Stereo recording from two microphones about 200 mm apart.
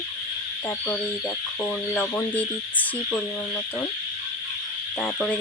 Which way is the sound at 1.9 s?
5° left (ahead or behind).